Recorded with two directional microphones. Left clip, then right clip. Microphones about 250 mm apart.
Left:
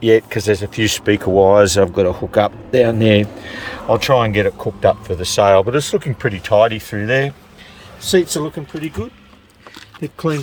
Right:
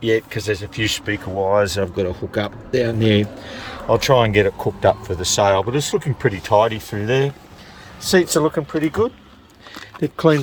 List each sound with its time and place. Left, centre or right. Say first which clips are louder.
0.0 s speech: left 6 dB; centre
8.1 s speech: left 1 dB; centre
10.0 s speech: right 5 dB; centre